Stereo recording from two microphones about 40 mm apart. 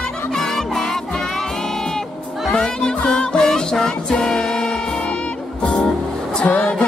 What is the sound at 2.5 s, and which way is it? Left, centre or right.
Music, centre.